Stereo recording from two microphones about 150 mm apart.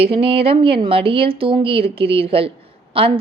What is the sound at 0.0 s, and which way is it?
A woman's voice, 40° right (ahead or behind).